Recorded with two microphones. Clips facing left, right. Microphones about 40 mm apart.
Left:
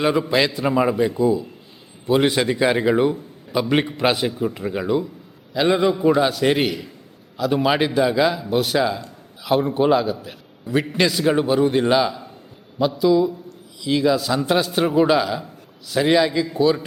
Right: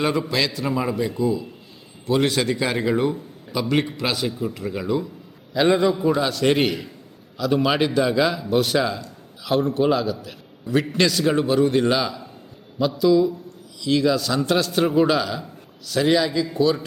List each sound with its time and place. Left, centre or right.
0.0 s a man's voice: centre
7.3 s a man's voice: centre
10.8 s a man's voice: centre